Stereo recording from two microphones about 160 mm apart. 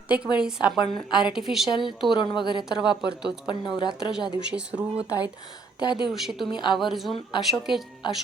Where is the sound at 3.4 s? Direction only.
30° left (ahead or behind).